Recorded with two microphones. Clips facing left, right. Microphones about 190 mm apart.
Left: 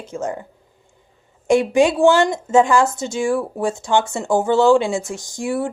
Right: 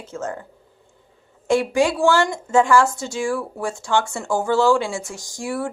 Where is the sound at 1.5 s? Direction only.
20° left (ahead or behind).